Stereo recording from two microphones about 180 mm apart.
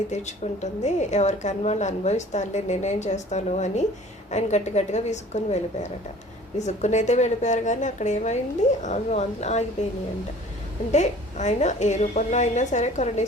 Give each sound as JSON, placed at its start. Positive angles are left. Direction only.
{"t": 0.1, "sound": "a woman's voice", "side_deg": 40}
{"t": 10.9, "sound": "a woman's voice", "side_deg": 40}